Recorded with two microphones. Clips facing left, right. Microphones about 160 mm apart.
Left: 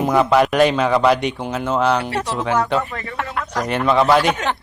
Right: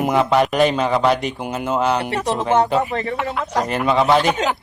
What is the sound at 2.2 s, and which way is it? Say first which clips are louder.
Speech: right 3 dB; 20° right (ahead or behind).